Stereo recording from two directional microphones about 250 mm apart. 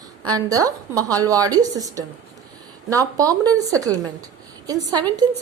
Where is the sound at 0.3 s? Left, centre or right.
Centre.